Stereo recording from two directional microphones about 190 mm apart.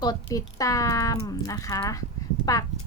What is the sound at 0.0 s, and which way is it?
A woman's voice, 20° left (ahead or behind).